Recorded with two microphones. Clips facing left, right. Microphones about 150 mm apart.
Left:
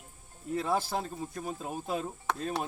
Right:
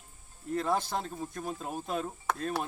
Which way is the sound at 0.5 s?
5° left (ahead or behind).